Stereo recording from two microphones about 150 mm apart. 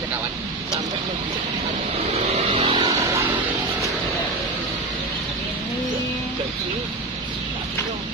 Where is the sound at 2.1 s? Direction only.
40° right (ahead or behind).